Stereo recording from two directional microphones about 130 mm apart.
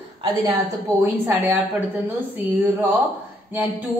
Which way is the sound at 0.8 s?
15° right (ahead or behind).